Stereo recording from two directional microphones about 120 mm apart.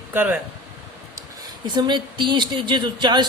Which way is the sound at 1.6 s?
40° right (ahead or behind).